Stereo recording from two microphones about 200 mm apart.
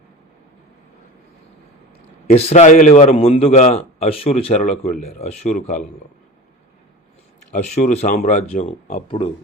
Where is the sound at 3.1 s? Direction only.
30° left (ahead or behind).